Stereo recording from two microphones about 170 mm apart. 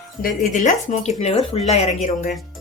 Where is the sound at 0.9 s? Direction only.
40° left (ahead or behind).